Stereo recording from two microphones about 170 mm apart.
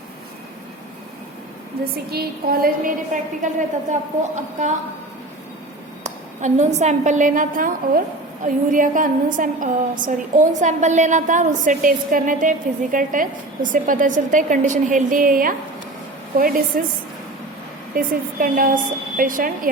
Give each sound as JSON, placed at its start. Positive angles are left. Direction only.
{"t": 2.0, "sound": "a woman's voice", "side_deg": -65}
{"t": 6.0, "sound": "a woman's voice", "side_deg": -45}
{"t": 17.9, "sound": "a woman's voice", "side_deg": -55}